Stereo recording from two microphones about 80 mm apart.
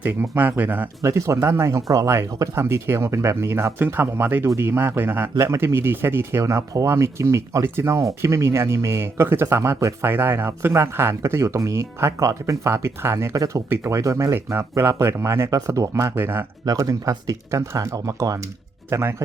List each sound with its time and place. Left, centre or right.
0.0 s speech: right
1.0 s speech: right
6.4 s speech: right
13.3 s speech: right
15.4 s speech: right
16.1 s speech: right
16.6 s speech: right